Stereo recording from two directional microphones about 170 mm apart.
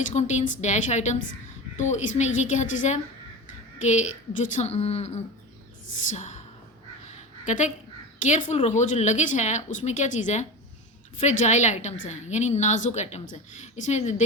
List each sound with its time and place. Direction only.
0.1 s a woman's voice: 40° left (ahead or behind)
7.4 s a woman's voice: 45° left (ahead or behind)